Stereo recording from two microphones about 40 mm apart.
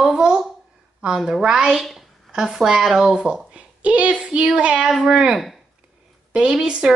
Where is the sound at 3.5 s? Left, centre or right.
Right.